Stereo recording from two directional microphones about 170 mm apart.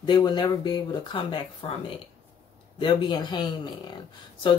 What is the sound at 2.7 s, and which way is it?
Speech, 25° left (ahead or behind).